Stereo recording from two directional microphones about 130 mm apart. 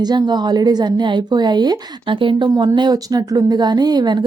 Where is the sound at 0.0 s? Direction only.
35° right (ahead or behind).